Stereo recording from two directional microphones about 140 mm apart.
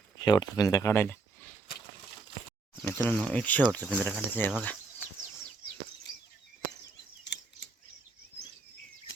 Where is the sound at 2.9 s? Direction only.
15° left (ahead or behind).